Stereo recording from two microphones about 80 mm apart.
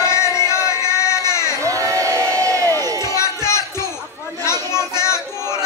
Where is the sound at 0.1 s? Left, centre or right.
Left.